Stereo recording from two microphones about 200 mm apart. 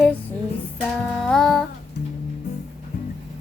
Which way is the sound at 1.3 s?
5° left (ahead or behind).